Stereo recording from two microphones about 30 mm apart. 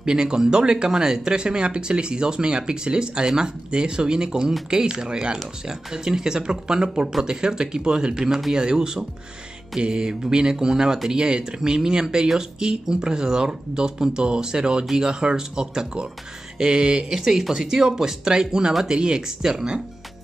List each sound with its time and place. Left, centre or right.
0.0 s speech: right
17.2 s speech: centre
17.6 s speech: right